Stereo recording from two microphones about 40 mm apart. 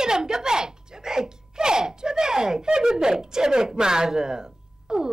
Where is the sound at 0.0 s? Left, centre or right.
Centre.